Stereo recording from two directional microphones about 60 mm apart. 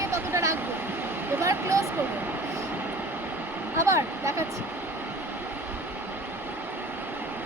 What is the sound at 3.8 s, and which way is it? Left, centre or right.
Speech, right.